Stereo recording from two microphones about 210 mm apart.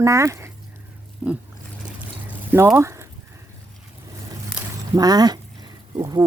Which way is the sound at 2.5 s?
10° right (ahead or behind).